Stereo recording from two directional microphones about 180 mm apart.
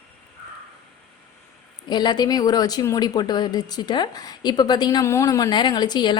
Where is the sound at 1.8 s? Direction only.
25° left (ahead or behind).